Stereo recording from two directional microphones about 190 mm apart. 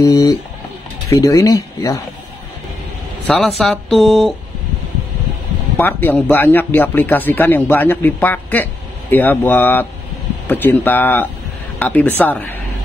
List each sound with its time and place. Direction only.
0.0 s speech: 15° left (ahead or behind)
3.3 s speech: centre (ahead or behind)
5.8 s speech: 10° left (ahead or behind)